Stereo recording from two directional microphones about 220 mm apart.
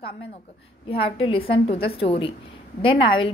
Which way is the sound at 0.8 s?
25° left (ahead or behind).